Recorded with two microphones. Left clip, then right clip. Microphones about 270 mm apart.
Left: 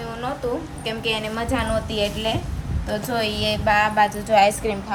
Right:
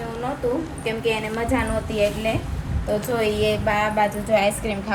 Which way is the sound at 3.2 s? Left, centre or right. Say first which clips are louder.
Right 1 dB; centre.